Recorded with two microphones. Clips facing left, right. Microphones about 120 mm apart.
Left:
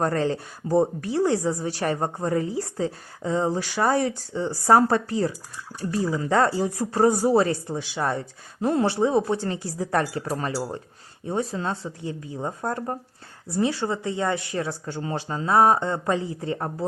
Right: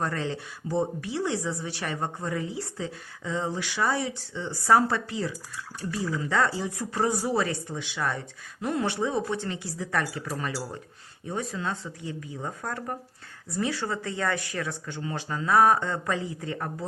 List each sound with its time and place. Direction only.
0.0 s a woman's voice: 40° left (ahead or behind)